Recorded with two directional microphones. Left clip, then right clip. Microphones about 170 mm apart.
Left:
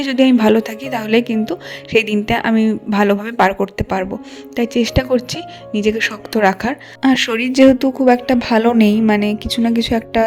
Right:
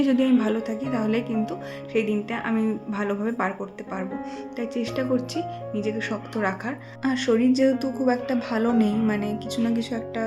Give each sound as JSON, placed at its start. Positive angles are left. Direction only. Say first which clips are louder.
{"t": 0.0, "sound": "speech", "louder": "left 8 dB", "side_deg": 50}